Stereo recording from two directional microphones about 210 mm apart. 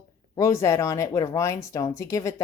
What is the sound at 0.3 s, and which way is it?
Speech, 15° left (ahead or behind).